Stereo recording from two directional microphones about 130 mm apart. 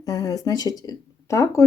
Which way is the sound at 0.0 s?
30° left (ahead or behind).